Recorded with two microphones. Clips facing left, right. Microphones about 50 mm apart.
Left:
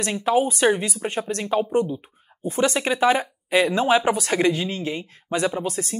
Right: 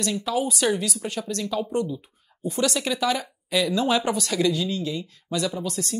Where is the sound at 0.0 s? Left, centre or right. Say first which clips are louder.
Left 5 dB; left.